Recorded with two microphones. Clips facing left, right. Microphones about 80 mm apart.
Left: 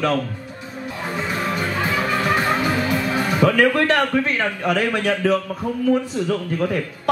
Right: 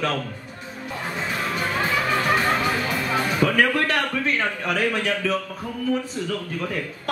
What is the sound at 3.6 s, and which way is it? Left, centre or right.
Speech, left.